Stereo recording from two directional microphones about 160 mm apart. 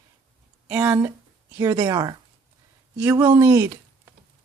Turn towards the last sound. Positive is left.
turn(degrees=-15)  # may be behind; listen again after turning